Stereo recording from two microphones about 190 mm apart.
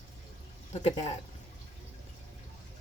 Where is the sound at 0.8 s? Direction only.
35° left (ahead or behind).